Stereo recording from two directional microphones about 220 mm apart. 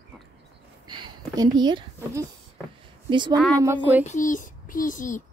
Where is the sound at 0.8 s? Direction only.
20° right (ahead or behind).